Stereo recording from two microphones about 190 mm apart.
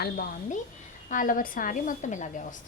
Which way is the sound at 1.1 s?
45° left (ahead or behind).